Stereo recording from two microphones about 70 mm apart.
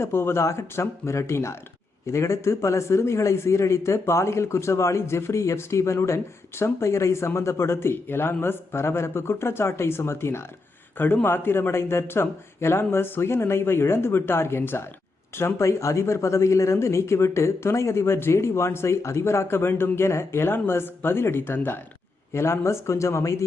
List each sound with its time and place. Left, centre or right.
0.0 s a man's voice: left